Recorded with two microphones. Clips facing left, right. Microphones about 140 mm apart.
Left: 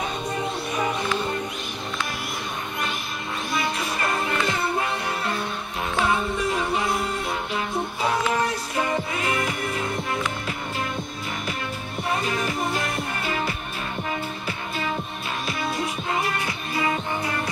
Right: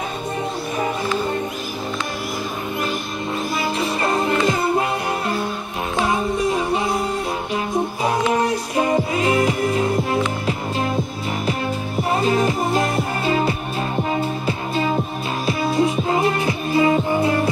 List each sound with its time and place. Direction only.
3.8 s music: 30° right (ahead or behind)
6.1 s music: 15° right (ahead or behind)
12.0 s music: 30° right (ahead or behind)